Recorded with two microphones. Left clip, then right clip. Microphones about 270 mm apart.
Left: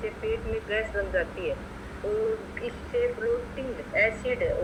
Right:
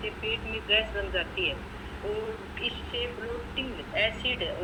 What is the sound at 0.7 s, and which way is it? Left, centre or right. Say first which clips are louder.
Speech: right 2 dB; centre.